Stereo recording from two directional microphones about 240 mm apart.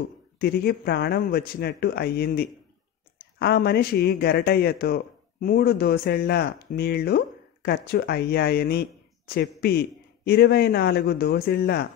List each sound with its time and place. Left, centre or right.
0.4 s a man's voice: left